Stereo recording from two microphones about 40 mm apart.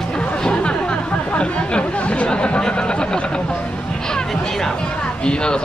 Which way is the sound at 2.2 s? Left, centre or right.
Left.